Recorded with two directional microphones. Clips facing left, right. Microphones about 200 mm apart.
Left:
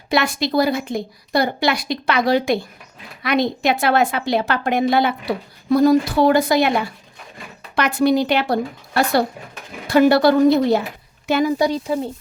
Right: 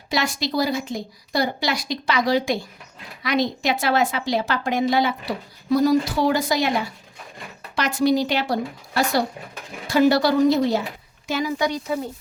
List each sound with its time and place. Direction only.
0.1 s a woman's voice: 60° left (ahead or behind)
11.5 s speech: 35° left (ahead or behind)